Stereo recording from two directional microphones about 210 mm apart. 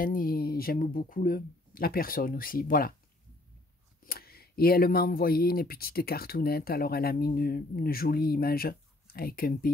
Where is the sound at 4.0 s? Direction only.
45° left (ahead or behind).